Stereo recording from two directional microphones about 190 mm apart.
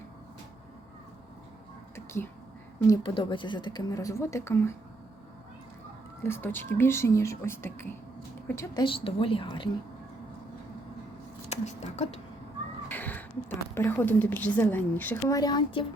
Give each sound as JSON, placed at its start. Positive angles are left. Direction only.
{"t": 2.8, "sound": "a woman's voice", "side_deg": 20}
{"t": 6.2, "sound": "a woman's voice", "side_deg": 10}
{"t": 8.8, "sound": "a woman's voice", "side_deg": 30}
{"t": 11.4, "sound": "speech", "side_deg": 35}
{"t": 12.9, "sound": "a sound", "side_deg": 10}
{"t": 13.7, "sound": "a woman's voice", "side_deg": 10}